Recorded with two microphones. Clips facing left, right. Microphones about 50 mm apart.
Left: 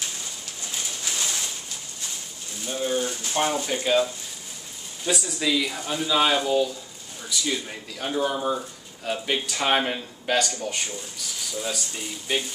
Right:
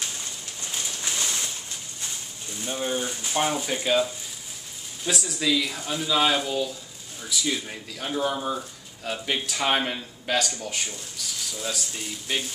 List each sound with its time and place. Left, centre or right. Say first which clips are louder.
2.6 s speech: left 2 dB; centre